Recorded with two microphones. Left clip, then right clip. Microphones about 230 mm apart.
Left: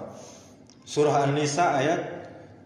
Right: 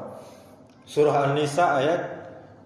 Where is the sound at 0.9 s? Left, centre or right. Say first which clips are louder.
Right 2 dB; left.